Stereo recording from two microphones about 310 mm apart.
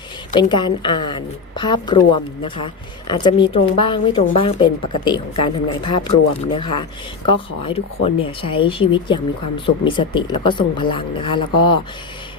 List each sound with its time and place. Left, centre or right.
0.3 s a woman's voice: centre
3.1 s a woman's voice: centre